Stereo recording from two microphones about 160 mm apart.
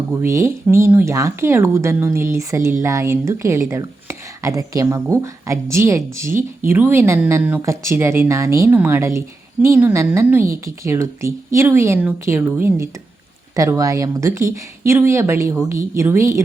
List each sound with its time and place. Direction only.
0.1 s speech: 15° right (ahead or behind)